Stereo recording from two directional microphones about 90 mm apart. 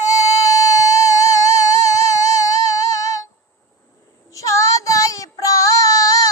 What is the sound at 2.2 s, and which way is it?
Music, 40° left (ahead or behind).